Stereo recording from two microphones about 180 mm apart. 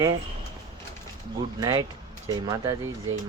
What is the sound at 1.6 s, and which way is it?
Speech, 20° right (ahead or behind).